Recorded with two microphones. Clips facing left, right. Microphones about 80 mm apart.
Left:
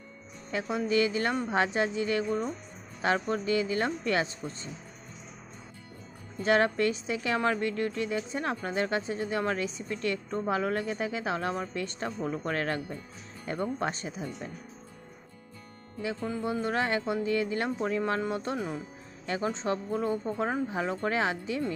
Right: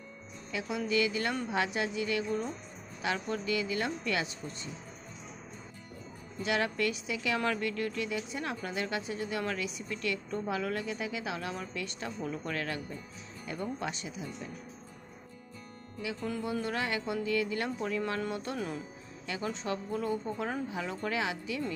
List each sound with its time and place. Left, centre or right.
0.5 s a woman's voice: left
6.4 s a woman's voice: left
16.0 s a woman's voice: left
19.2 s a woman's voice: left